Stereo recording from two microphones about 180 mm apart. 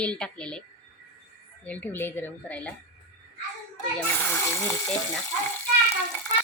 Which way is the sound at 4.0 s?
10° left (ahead or behind).